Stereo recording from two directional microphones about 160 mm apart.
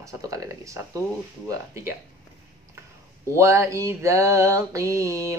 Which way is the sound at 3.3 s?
20° right (ahead or behind).